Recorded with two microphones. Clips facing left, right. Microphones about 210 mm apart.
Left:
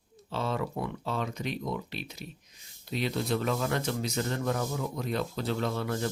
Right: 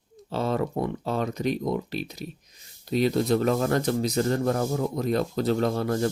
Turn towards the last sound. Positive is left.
turn(degrees=-40)  # may be behind; listen again after turning